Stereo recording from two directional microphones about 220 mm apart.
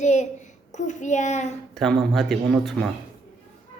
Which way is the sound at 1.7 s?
Centre (ahead or behind).